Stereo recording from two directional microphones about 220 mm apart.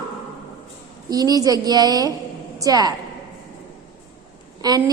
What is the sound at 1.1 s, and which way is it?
A woman's voice, 15° right (ahead or behind).